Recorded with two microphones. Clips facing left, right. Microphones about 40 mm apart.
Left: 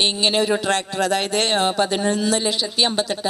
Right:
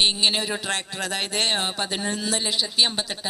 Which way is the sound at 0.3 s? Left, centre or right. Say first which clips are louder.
Left 6 dB; left.